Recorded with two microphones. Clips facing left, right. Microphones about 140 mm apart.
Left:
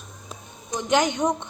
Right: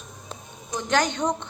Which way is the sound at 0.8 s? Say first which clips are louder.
Left 2 dB; 20° left (ahead or behind).